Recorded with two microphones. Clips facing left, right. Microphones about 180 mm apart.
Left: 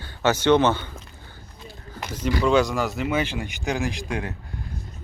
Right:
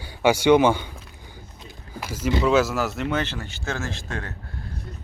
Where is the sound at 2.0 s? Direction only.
5° right (ahead or behind).